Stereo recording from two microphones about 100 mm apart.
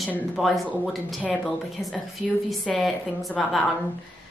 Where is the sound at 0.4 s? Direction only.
Centre (ahead or behind).